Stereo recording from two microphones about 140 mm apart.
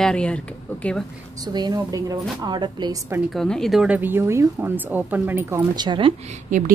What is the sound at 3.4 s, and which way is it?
Speech, 5° left (ahead or behind).